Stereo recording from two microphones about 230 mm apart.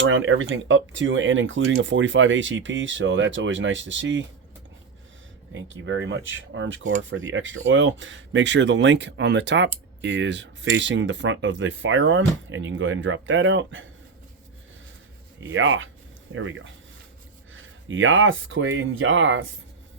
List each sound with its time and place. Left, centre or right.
0.3 s speech: right
5.5 s speech: right
15.4 s speech: right